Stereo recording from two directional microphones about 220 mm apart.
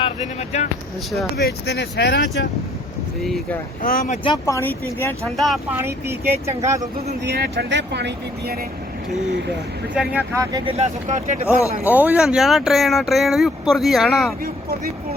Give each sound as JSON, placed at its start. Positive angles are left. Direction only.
{"t": 0.0, "sound": "speech", "side_deg": 30}
{"t": 1.4, "sound": "speech", "side_deg": 50}
{"t": 3.2, "sound": "speech", "side_deg": 0}
{"t": 3.8, "sound": "speech", "side_deg": 35}
{"t": 5.8, "sound": "speech", "side_deg": -10}
{"t": 7.3, "sound": "speech", "side_deg": -50}
{"t": 9.9, "sound": "speech", "side_deg": -5}
{"t": 10.7, "sound": "speech", "side_deg": -30}
{"t": 11.9, "sound": "speech", "side_deg": -5}
{"t": 14.4, "sound": "speech", "side_deg": -45}